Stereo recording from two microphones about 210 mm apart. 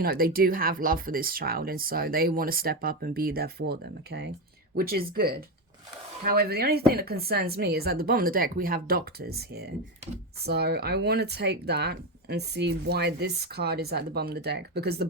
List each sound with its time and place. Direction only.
0.0 s speech: 45° right (ahead or behind)